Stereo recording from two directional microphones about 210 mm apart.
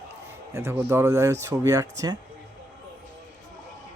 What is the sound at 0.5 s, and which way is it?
Speech, 10° right (ahead or behind).